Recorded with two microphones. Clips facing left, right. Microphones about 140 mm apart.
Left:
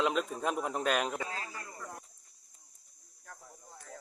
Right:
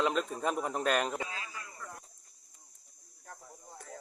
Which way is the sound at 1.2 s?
40° left (ahead or behind).